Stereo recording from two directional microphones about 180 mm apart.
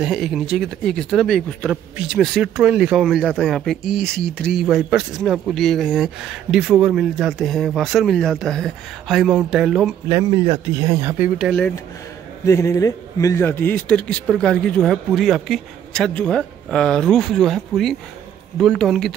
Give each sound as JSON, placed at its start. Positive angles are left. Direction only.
{"t": 0.0, "sound": "a man's voice", "side_deg": -5}
{"t": 10.0, "sound": "speech", "side_deg": -20}
{"t": 10.4, "sound": "speech", "side_deg": -30}
{"t": 11.0, "sound": "speech", "side_deg": -15}
{"t": 12.4, "sound": "a man's voice", "side_deg": 15}